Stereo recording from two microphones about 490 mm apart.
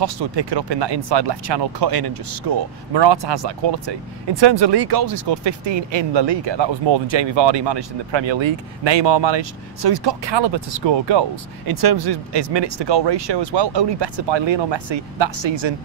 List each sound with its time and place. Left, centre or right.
0.0 s speech: right